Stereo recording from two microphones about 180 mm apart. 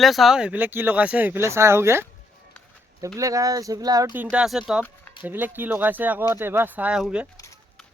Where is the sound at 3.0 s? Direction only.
20° right (ahead or behind).